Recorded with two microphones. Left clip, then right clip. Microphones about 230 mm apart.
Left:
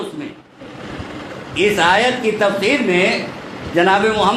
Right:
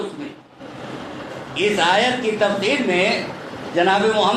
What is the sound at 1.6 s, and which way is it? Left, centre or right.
A man's voice, left.